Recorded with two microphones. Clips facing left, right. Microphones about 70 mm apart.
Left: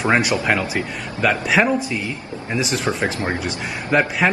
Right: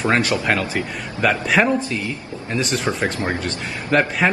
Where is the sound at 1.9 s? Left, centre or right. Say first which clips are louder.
Even; centre.